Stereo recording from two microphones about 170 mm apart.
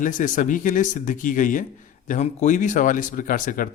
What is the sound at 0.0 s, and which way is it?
Speech, 50° left (ahead or behind).